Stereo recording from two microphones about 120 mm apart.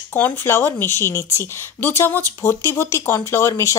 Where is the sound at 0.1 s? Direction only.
15° left (ahead or behind).